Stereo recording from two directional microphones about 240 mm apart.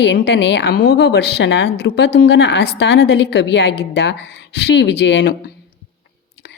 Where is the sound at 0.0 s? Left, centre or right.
Left.